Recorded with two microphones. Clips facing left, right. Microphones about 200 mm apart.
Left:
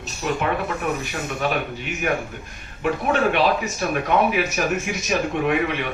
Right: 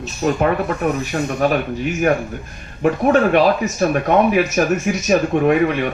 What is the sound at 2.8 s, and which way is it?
Speech, 45° right (ahead or behind).